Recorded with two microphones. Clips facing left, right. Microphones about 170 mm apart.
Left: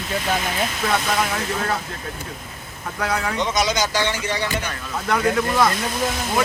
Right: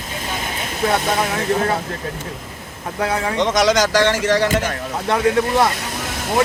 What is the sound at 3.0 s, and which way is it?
Speech, 25° right (ahead or behind).